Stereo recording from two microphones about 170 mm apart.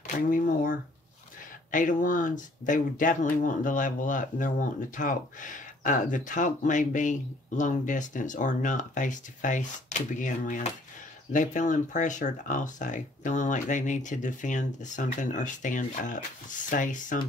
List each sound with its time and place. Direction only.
0.0 s speech: 50° left (ahead or behind)